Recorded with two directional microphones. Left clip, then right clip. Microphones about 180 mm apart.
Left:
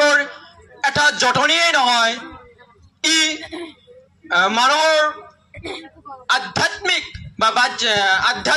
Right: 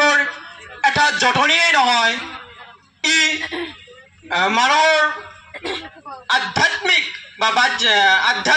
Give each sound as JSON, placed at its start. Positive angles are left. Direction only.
{"t": 0.0, "sound": "a sound", "side_deg": 0}
{"t": 0.7, "sound": "music", "side_deg": 0}
{"t": 1.2, "sound": "a man's voice", "side_deg": 0}
{"t": 3.3, "sound": "speech", "side_deg": -40}
{"t": 4.3, "sound": "a man's voice", "side_deg": 0}
{"t": 5.5, "sound": "a sound", "side_deg": -40}
{"t": 6.3, "sound": "a man's voice", "side_deg": 0}